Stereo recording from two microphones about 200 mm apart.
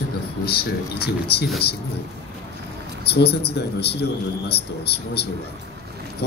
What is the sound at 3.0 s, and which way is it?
A man's voice, 55° left (ahead or behind).